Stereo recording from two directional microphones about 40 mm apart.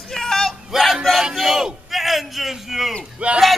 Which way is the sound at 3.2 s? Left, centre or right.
Right.